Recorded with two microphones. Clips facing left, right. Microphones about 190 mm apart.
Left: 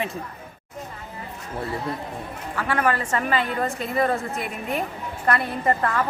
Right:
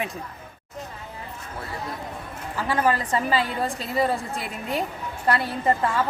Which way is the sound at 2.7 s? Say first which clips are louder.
Right 1 dB; 35° right (ahead or behind).